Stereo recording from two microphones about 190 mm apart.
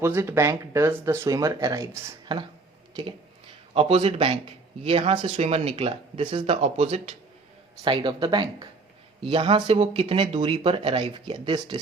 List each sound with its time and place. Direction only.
0.0 s speech: 15° right (ahead or behind)
3.8 s speech: 30° right (ahead or behind)